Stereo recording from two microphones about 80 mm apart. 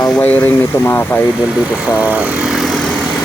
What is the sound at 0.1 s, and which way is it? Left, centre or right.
Speech, centre.